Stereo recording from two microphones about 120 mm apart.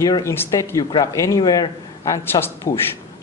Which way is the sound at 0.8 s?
35° left (ahead or behind).